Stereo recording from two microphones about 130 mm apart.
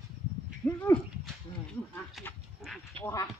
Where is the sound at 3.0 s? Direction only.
25° left (ahead or behind).